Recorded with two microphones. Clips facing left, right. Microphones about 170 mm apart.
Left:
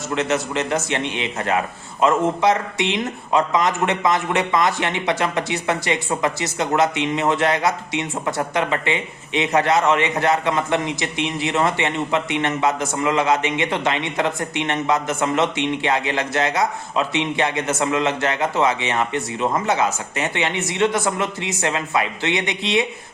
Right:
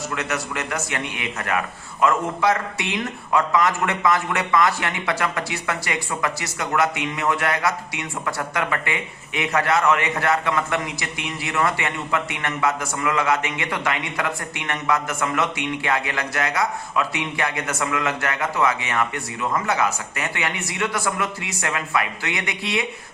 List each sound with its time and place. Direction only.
0.1 s a man's voice: 25° left (ahead or behind)